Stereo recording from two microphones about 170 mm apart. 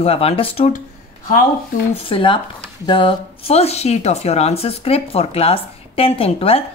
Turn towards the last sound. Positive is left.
turn(degrees=35)  # may be behind; listen again after turning